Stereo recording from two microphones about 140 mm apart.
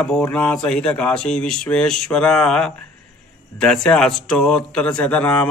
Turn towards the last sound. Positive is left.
turn(degrees=10)  # may be behind; listen again after turning